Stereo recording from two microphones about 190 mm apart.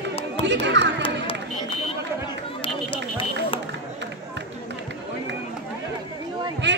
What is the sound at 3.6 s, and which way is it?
Run, 70° right (ahead or behind).